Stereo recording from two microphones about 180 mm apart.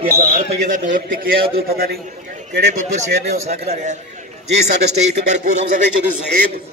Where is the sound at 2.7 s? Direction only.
40° right (ahead or behind).